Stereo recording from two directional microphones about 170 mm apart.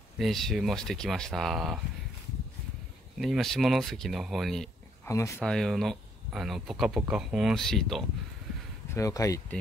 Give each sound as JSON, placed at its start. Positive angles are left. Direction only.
{"t": 0.2, "sound": "speech", "side_deg": 0}
{"t": 3.2, "sound": "speech", "side_deg": 0}
{"t": 5.0, "sound": "speech", "side_deg": 15}
{"t": 5.4, "sound": "speech", "side_deg": 0}
{"t": 8.9, "sound": "speech", "side_deg": 20}